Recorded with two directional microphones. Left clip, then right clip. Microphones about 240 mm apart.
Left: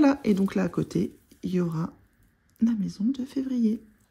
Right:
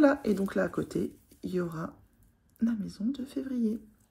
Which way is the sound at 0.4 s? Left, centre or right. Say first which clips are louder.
Left 2 dB; left.